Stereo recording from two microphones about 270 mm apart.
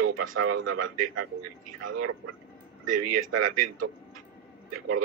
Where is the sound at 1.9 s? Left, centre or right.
Right.